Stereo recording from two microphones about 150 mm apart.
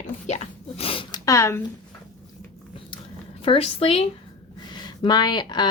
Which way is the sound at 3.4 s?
40° left (ahead or behind).